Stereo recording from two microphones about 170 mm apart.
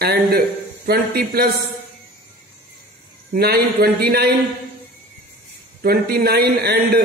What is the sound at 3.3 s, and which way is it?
A man's voice, 65° right (ahead or behind).